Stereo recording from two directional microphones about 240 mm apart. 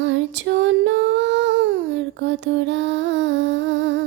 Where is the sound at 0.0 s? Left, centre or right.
Right.